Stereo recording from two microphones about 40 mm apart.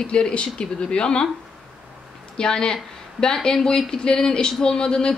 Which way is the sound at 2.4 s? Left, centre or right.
Centre.